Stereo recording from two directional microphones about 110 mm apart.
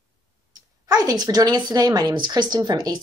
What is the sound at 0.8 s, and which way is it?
Speech, 35° right (ahead or behind).